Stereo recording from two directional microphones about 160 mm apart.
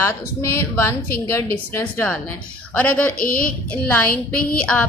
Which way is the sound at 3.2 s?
60° left (ahead or behind).